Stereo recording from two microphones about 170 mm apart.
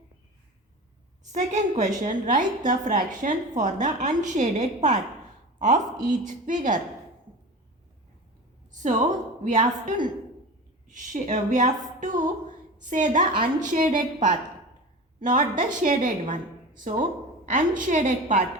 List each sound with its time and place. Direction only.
1.3 s a woman's voice: 45° right (ahead or behind)
8.7 s a sound: 45° right (ahead or behind)
9.4 s a woman's voice: 45° right (ahead or behind)